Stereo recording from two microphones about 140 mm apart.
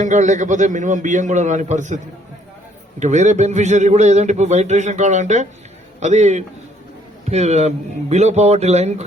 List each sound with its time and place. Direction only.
0.0 s a man's voice: 60° right (ahead or behind)
3.0 s a man's voice: 55° right (ahead or behind)